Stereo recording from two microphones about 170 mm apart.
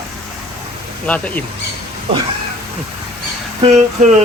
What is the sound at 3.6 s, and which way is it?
Speech, 45° right (ahead or behind).